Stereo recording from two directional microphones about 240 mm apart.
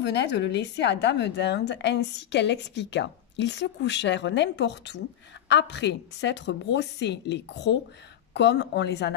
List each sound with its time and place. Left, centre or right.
0.0 s a woman's voice: left